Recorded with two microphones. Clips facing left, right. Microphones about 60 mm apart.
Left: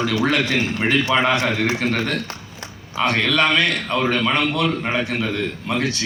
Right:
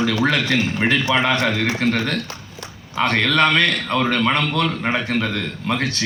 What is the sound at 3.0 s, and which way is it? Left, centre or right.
A man's voice, right.